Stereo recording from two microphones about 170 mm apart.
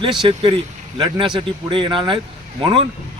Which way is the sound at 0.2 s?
30° right (ahead or behind).